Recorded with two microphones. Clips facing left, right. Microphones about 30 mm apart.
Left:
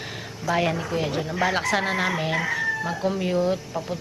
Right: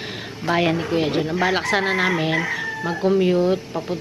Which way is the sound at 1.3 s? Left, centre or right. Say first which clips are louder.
Even; centre.